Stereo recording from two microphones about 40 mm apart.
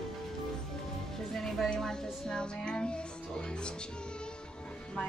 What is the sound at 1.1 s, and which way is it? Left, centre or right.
Speech, centre.